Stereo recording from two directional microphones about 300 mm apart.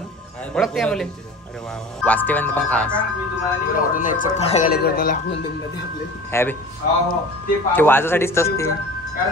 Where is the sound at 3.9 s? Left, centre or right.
Left.